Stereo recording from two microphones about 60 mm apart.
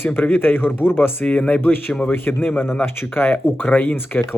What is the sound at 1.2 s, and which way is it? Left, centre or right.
Speech, left.